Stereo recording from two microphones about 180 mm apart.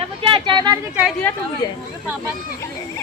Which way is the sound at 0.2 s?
25° right (ahead or behind).